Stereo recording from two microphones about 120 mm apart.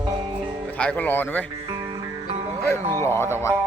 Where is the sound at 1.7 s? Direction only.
55° right (ahead or behind).